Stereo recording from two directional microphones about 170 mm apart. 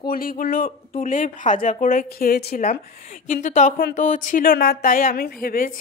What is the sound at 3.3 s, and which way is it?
Speech, 50° left (ahead or behind).